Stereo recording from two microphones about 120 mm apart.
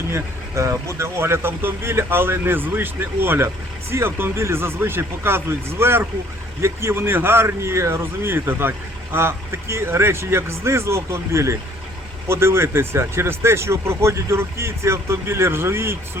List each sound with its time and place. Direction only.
0.1 s speech: 25° right (ahead or behind)